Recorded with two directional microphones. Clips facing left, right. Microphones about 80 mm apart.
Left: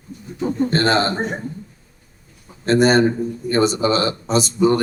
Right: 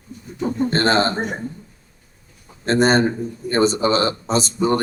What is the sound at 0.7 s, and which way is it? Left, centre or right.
Speech, right.